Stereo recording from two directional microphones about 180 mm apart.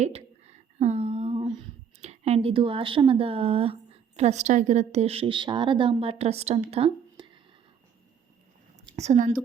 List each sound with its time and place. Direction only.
0.0 s a sound: 35° right (ahead or behind)
2.0 s speech: 35° right (ahead or behind)
9.0 s a woman's voice: 40° right (ahead or behind)